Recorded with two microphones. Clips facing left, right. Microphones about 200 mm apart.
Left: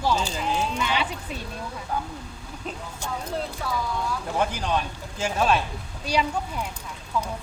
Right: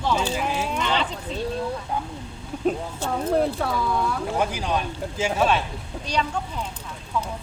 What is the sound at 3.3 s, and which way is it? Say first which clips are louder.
Speech: right 9 dB; 55° right (ahead or behind).